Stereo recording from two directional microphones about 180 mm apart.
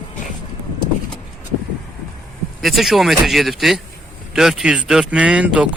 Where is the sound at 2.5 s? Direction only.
Centre (ahead or behind).